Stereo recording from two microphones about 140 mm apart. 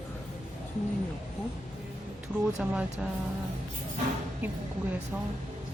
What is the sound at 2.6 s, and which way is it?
Speech, 10° right (ahead or behind).